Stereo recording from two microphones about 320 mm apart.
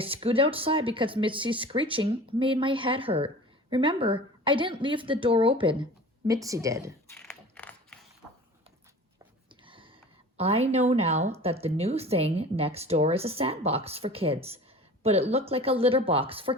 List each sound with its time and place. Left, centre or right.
0.0 s speech: centre
7.1 s mechanisms: centre
9.6 s speech: centre